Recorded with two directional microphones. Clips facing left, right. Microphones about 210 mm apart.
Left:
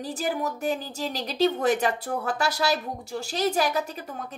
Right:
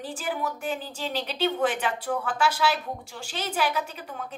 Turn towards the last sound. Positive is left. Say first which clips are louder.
# left 1 dB
turn(degrees=40)  # may be behind; listen again after turning